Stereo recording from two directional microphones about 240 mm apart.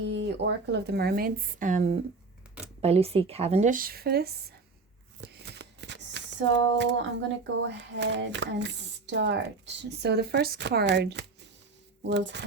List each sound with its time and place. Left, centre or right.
0.1 s speech: right